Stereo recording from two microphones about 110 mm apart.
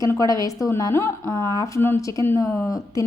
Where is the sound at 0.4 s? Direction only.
30° left (ahead or behind).